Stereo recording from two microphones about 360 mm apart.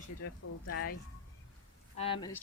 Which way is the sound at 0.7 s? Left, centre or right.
Left.